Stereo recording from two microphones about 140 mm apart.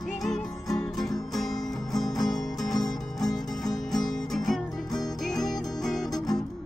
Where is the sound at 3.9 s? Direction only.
Centre (ahead or behind).